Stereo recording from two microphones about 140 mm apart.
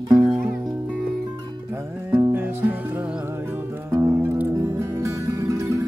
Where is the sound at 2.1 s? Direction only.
20° right (ahead or behind).